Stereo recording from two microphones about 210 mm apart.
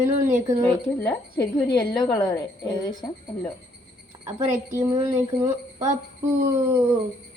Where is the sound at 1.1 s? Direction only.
15° left (ahead or behind).